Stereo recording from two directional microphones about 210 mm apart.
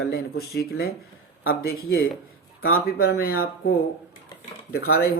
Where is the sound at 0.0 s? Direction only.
50° left (ahead or behind).